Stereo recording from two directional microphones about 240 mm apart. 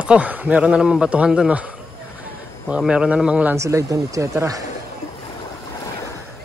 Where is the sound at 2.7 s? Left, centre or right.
Centre.